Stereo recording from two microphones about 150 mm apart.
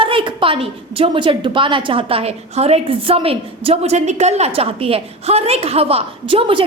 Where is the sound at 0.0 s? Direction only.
35° right (ahead or behind).